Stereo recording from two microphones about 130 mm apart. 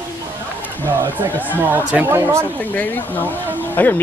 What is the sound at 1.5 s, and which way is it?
Speech, 15° right (ahead or behind).